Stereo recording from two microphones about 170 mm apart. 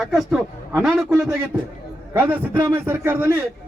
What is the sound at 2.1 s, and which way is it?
A man's voice, 10° right (ahead or behind).